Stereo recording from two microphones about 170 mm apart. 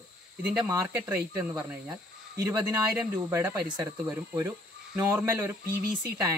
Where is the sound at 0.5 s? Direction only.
20° right (ahead or behind).